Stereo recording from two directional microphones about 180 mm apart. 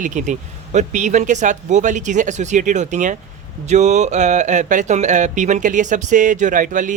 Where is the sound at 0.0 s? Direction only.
45° right (ahead or behind).